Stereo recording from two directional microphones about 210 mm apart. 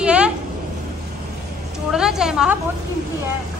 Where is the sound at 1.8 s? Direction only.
5° right (ahead or behind).